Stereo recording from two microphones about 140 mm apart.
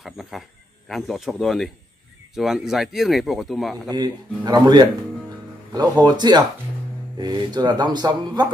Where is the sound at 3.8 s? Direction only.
30° right (ahead or behind).